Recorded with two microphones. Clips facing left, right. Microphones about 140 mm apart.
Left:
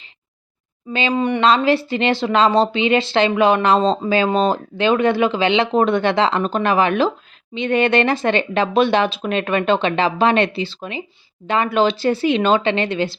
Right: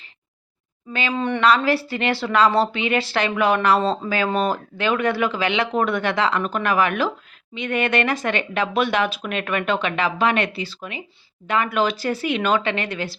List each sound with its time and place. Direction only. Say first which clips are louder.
0.9 s speech: left 4 dB; 20° left (ahead or behind)